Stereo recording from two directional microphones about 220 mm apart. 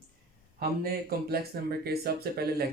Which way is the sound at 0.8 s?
45° right (ahead or behind).